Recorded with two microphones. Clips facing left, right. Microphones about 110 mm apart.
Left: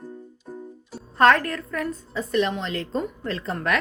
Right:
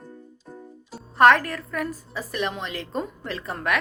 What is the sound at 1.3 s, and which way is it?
Speech, 10° right (ahead or behind).